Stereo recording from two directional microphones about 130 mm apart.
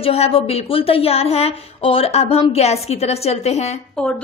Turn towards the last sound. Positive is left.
turn(degrees=5)  # may be behind; listen again after turning